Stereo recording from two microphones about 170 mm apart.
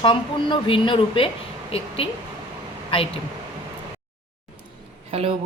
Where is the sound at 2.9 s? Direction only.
35° left (ahead or behind).